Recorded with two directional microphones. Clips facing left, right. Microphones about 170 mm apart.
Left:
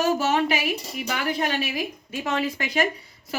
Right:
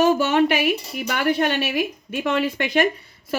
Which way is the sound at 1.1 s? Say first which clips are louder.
Right 6 dB; 65° right (ahead or behind).